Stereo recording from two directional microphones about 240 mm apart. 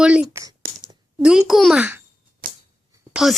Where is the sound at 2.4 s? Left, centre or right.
Right.